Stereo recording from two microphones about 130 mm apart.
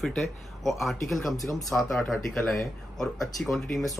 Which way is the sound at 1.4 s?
25° left (ahead or behind).